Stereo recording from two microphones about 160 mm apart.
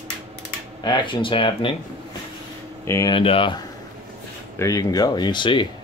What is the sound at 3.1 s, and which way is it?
Speech, 35° left (ahead or behind).